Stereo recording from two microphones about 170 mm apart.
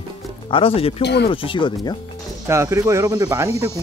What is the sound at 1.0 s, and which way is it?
Speech, 80° left.